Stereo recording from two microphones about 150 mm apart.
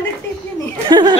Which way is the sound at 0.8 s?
30° right (ahead or behind).